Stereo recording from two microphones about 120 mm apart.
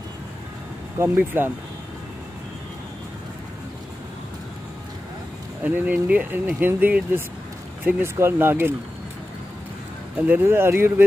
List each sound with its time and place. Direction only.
0.9 s speech: 20° right (ahead or behind)
5.6 s speech: 15° right (ahead or behind)
10.2 s speech: 15° right (ahead or behind)